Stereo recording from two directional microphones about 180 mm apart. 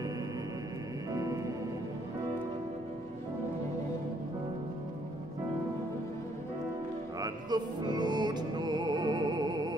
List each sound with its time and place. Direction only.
1.1 s music: 20° right (ahead or behind)
7.2 s music: 20° right (ahead or behind)